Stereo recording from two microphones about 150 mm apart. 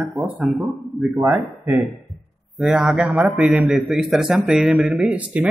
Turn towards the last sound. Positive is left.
turn(degrees=-10)  # may be behind; listen again after turning